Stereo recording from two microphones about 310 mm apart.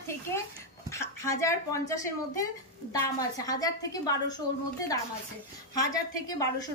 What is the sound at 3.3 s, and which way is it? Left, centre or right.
A woman's voice, centre.